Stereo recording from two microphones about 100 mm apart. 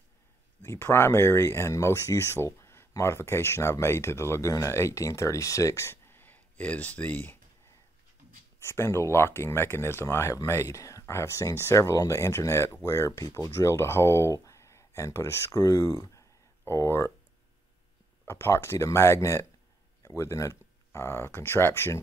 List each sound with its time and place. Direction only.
0.6 s speech: 25° left (ahead or behind)
8.5 s speech: 25° left (ahead or behind)
18.2 s speech: 25° left (ahead or behind)